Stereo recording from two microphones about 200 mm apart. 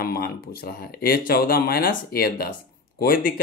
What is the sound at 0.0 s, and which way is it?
Speech, 50° left (ahead or behind).